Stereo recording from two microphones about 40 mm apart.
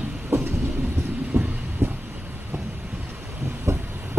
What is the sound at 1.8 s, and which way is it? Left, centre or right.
Vehicle, right.